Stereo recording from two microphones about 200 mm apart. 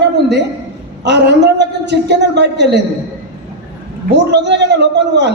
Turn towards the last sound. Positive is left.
turn(degrees=-60)  # may be behind; listen again after turning